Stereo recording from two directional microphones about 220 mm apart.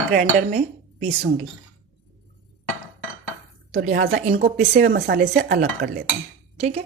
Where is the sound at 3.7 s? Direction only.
40° right (ahead or behind).